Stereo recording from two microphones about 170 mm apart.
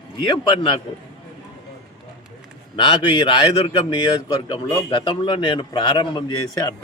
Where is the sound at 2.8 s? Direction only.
30° left (ahead or behind).